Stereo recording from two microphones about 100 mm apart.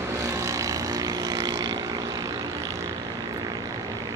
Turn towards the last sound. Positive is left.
turn(degrees=-40)  # may be behind; listen again after turning